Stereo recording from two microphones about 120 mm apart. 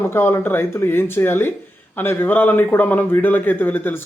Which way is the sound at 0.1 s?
20° left (ahead or behind).